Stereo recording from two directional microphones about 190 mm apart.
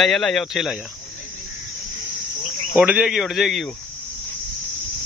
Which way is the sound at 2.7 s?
5° right (ahead or behind).